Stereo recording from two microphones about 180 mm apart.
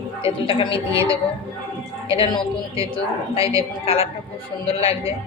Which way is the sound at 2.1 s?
30° left (ahead or behind).